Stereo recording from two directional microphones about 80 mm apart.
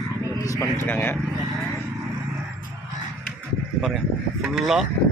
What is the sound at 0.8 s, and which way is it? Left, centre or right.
Speech, left.